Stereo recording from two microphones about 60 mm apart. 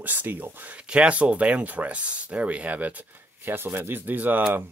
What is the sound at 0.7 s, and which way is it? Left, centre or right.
Speech, centre.